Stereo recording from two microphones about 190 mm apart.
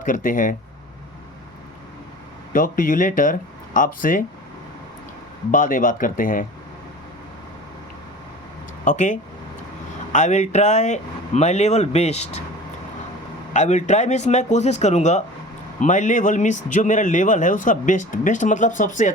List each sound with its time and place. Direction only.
0.0 s speech: 45° left (ahead or behind)
2.5 s speech: 45° left (ahead or behind)
5.5 s speech: 45° left (ahead or behind)
8.8 s speech: 40° left (ahead or behind)
13.5 s speech: 40° left (ahead or behind)